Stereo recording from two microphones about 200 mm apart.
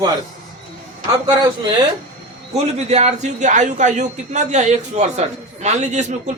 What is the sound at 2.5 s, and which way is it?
A man's voice, 35° right (ahead or behind).